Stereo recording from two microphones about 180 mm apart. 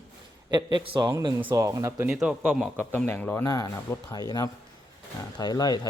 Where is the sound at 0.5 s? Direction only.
25° right (ahead or behind).